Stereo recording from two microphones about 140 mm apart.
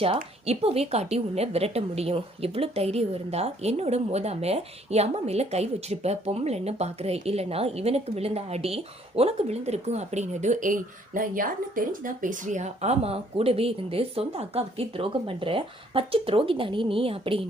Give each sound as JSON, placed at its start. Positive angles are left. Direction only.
{"t": 0.4, "sound": "a woman's voice", "side_deg": -45}